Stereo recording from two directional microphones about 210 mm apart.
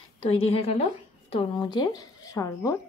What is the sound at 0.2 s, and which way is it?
A woman's voice, 30° left (ahead or behind).